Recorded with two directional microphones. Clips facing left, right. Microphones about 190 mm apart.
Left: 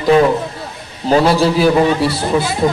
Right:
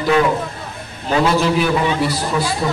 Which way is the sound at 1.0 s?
35° left (ahead or behind).